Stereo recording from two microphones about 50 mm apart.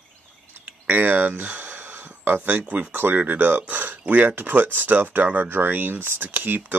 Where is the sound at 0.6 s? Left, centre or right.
Right.